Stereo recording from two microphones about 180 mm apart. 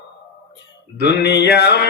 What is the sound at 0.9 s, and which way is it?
Mantra, 65° left (ahead or behind).